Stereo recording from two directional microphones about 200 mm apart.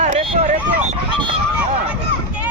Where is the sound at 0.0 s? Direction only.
35° right (ahead or behind).